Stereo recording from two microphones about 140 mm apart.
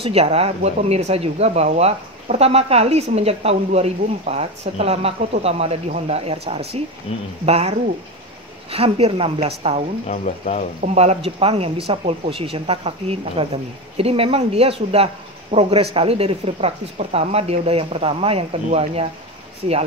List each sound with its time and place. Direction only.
0.0 s speech: 45° right (ahead or behind)
10.0 s speech: 60° left (ahead or behind)
10.8 s speech: 50° right (ahead or behind)